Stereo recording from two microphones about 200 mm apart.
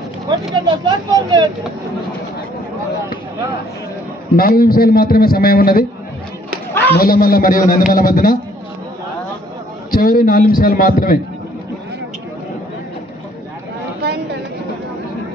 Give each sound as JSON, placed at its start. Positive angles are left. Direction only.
{"t": 0.7, "sound": "speech", "side_deg": -20}
{"t": 4.4, "sound": "a man's voice", "side_deg": 45}
{"t": 6.7, "sound": "a sound", "side_deg": 10}
{"t": 7.0, "sound": "a man's voice", "side_deg": 45}
{"t": 9.8, "sound": "a man's voice", "side_deg": 45}